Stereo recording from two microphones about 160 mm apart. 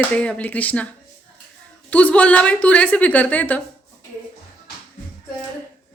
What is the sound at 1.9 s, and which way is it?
A woman's voice, 10° left (ahead or behind).